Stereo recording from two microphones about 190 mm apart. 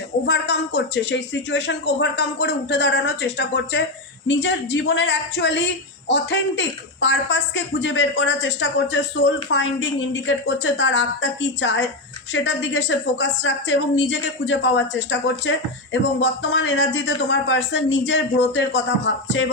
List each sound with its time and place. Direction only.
0.3 s a woman's voice: 65° left (ahead or behind)